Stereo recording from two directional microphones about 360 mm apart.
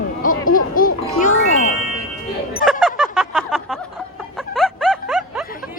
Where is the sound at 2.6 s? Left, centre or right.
Centre.